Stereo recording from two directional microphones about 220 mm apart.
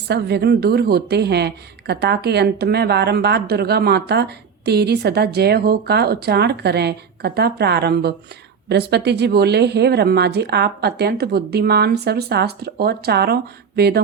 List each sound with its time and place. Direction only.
0.1 s a woman's voice: 50° right (ahead or behind)